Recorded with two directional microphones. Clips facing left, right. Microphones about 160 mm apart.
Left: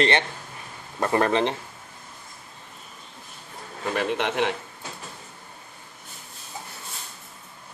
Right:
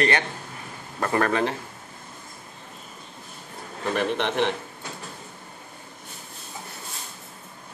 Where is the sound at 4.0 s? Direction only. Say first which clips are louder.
Even; 10° left (ahead or behind).